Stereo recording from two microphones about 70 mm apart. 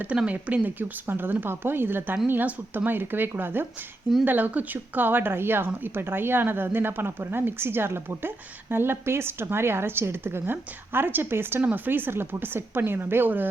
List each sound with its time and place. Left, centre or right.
0.3 s speech: centre